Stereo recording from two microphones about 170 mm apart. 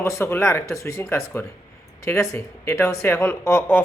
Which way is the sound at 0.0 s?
15° left (ahead or behind).